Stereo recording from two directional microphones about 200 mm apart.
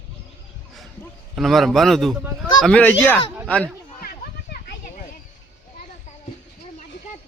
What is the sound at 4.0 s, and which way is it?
Children playing, 50° left (ahead or behind).